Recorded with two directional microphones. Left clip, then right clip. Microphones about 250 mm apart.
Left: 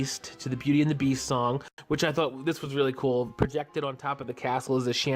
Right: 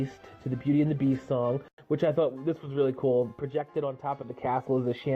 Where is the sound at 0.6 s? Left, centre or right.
Left.